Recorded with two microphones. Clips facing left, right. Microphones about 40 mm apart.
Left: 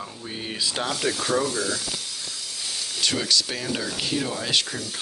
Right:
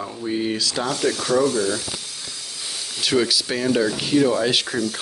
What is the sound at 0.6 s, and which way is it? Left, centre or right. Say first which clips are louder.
Speech: right 3 dB; left.